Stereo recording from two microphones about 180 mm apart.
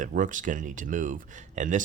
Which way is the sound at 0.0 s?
45° right (ahead or behind).